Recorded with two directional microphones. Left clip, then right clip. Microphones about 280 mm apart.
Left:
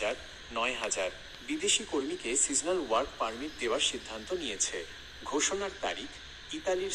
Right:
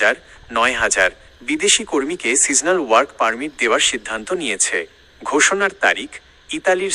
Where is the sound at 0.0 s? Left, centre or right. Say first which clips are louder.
Right 17 dB; right.